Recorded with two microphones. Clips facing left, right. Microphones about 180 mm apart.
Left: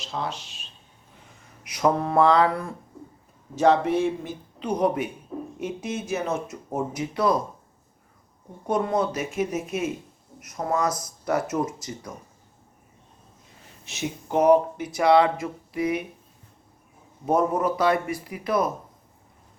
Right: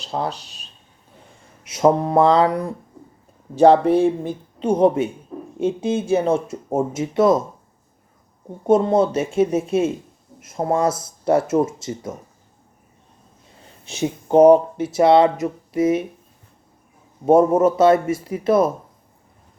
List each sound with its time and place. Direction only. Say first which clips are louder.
0.0 s speech: right 6 dB; 35° right (ahead or behind)
1.6 s speech: right 6 dB; 25° right (ahead or behind)
3.5 s speech: right 7 dB; 35° right (ahead or behind)
8.6 s speech: right 8 dB; 25° right (ahead or behind)
13.8 s speech: right 7 dB; 30° right (ahead or behind)
17.2 s speech: right 8 dB; 25° right (ahead or behind)